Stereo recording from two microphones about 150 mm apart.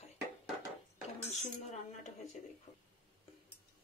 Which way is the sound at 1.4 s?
50° left (ahead or behind).